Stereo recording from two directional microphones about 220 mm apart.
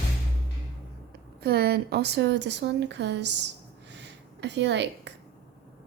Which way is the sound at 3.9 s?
50° right (ahead or behind).